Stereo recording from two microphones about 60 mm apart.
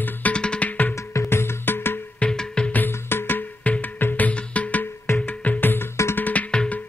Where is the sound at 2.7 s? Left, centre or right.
Left.